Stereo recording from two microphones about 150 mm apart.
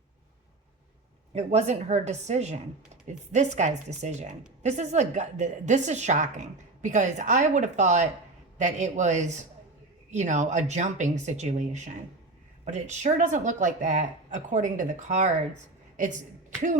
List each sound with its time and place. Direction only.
1.3 s speech: 50° right (ahead or behind)